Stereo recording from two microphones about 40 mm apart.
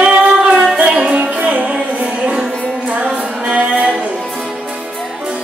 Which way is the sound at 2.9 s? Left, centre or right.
Right.